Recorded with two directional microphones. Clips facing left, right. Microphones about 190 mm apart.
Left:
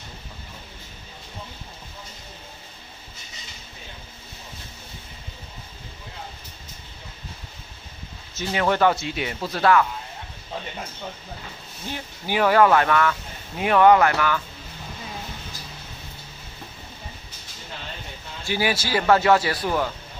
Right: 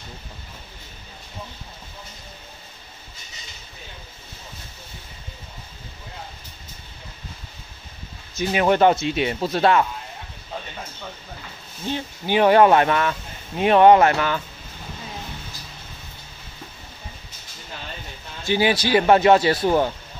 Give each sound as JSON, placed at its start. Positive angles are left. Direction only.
{"t": 8.4, "sound": "speech", "side_deg": -15}
{"t": 11.9, "sound": "speech", "side_deg": -25}
{"t": 18.4, "sound": "speech", "side_deg": -20}